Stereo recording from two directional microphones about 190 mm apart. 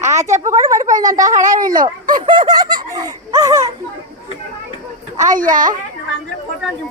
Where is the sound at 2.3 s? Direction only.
25° right (ahead or behind).